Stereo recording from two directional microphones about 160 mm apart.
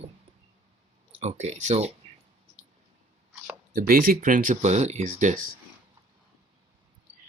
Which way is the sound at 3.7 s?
65° right (ahead or behind).